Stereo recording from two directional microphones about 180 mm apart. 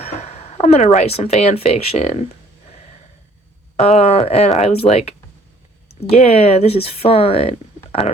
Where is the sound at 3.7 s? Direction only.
35° left (ahead or behind).